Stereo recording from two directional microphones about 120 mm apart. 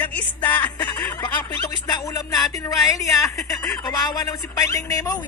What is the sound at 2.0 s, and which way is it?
Speech, 30° left (ahead or behind).